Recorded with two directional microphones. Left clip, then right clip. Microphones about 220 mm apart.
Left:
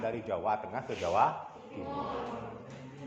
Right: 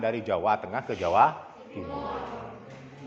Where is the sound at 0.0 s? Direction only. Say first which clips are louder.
Right 7 dB; 45° right (ahead or behind).